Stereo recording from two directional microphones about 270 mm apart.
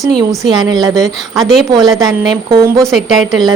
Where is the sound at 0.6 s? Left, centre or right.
Centre.